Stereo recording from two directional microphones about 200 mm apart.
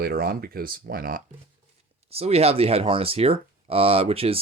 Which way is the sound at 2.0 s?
30° right (ahead or behind).